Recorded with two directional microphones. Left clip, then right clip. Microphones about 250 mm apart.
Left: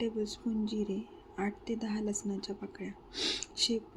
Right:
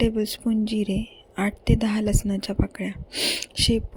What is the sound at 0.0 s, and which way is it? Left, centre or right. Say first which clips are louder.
Speech: right 11 dB; right.